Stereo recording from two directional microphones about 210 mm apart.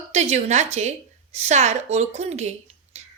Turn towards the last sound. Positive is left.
turn(degrees=-35)  # may be behind; listen again after turning